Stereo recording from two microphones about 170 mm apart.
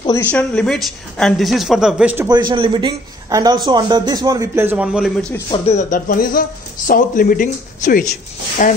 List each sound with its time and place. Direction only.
0.2 s speech: 5° left (ahead or behind)
2.2 s a man's voice: 25° right (ahead or behind); by 5.1 s 5° right (ahead or behind)
5.5 s speech: 40° left (ahead or behind)